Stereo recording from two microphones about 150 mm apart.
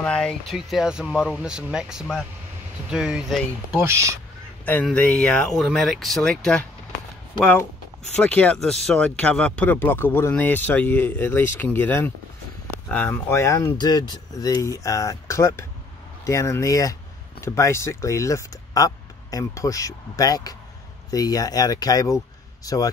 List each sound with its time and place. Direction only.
0.0 s speech: 5° left (ahead or behind)
3.7 s speech: 20° right (ahead or behind)
4.8 s speech: 10° left (ahead or behind)
8.2 s speech: 10° left (ahead or behind)